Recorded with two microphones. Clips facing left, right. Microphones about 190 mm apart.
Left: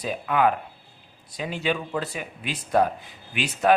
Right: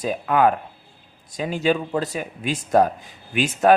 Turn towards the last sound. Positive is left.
turn(degrees=-45)  # may be behind; listen again after turning